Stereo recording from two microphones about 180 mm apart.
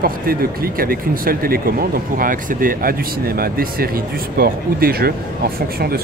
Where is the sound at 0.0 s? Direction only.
55° right (ahead or behind).